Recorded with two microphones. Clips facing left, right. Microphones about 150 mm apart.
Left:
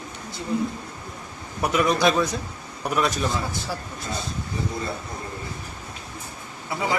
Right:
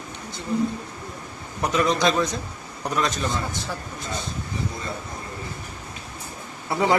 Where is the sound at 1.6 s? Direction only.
10° left (ahead or behind).